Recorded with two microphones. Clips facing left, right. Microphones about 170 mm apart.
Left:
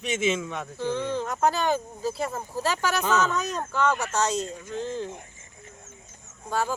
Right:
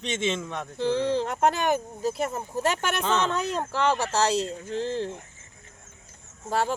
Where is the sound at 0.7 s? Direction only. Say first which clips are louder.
Right 4 dB; 35° right (ahead or behind).